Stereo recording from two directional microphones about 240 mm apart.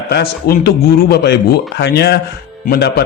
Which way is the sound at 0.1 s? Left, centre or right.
Left.